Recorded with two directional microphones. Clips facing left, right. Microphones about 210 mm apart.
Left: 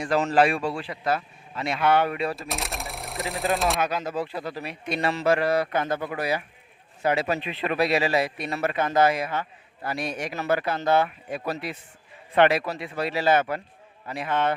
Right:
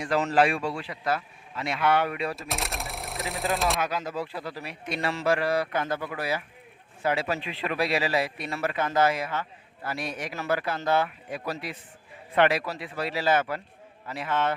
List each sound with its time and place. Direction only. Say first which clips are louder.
0.0 s speech: left 2 dB; 40° left (ahead or behind)
2.3 s speech: left 1 dB; centre (ahead or behind)
3.8 s a man's voice: left 3 dB; 25° left (ahead or behind)